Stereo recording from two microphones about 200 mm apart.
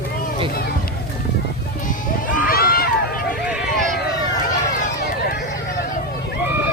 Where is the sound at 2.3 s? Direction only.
45° left (ahead or behind).